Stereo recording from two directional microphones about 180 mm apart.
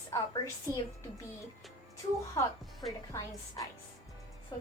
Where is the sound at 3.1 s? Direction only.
15° left (ahead or behind).